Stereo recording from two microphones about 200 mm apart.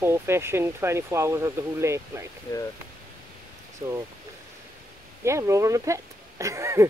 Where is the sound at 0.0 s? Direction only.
10° right (ahead or behind).